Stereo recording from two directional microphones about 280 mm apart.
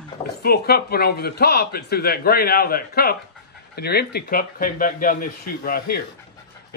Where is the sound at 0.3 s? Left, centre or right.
Left.